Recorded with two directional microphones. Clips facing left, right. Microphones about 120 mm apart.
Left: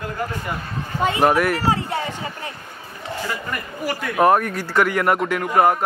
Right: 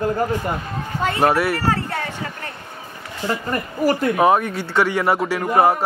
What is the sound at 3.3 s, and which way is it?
Speech, 30° right (ahead or behind).